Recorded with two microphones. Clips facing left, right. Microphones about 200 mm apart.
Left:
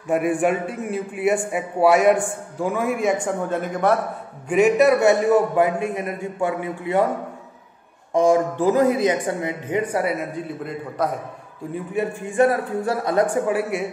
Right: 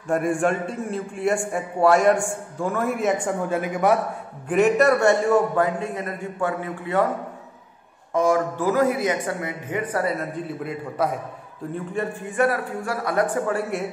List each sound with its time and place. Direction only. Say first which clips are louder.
0.1 s a man's voice: left 2 dB; 5° left (ahead or behind)
8.1 s speech: left 3 dB; 15° left (ahead or behind)
10.1 s a man's voice: left 1 dB; centre (ahead or behind)
11.7 s a man's voice: left 3 dB; 10° left (ahead or behind)
12.4 s speech: left 4 dB; 25° left (ahead or behind)
13.5 s a man's voice: left 3 dB; 5° left (ahead or behind)